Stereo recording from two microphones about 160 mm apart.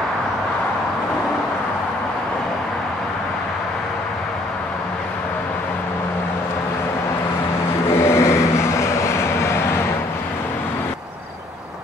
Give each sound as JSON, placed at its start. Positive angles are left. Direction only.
{"t": 7.9, "sound": "vehicle", "side_deg": 15}